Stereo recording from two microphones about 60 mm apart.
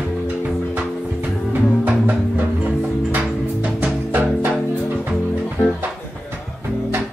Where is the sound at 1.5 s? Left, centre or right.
Right.